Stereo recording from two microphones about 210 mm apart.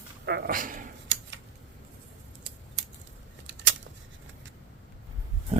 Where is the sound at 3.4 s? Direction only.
60° right (ahead or behind).